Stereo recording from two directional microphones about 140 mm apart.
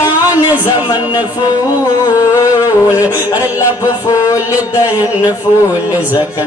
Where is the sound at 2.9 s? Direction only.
25° left (ahead or behind).